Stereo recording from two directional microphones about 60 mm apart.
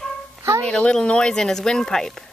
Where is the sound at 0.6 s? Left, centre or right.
Centre.